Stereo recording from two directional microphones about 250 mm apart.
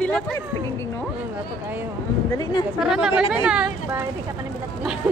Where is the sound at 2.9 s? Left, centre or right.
Centre.